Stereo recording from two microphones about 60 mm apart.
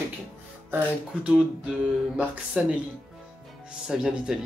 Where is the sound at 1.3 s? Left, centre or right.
Centre.